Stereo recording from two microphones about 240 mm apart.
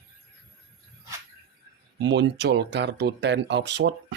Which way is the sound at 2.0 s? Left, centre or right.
Right.